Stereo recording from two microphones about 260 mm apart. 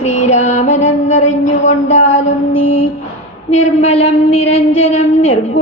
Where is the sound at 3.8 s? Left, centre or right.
Left.